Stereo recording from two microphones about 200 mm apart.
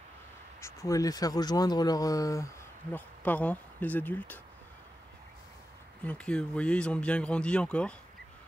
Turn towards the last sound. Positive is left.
turn(degrees=5)  # may be behind; listen again after turning